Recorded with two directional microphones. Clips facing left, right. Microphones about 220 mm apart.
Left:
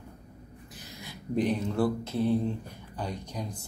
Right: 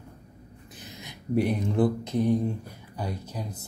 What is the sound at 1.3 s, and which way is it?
Speech, 10° right (ahead or behind).